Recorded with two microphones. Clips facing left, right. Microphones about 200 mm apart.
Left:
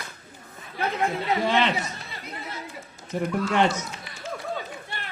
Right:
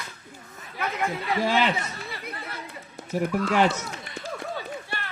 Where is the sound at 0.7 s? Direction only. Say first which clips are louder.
Left 3 dB; 25° left (ahead or behind).